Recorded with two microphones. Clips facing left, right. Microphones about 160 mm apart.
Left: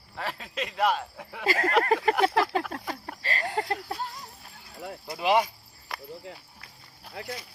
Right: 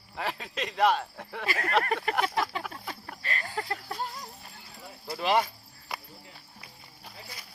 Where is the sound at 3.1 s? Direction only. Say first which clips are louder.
Even; 35° left (ahead or behind).